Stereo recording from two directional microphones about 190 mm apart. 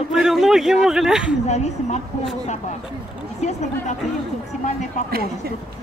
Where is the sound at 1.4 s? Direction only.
35° left (ahead or behind).